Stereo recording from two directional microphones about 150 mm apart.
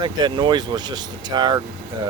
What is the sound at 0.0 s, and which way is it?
Speech, 30° right (ahead or behind).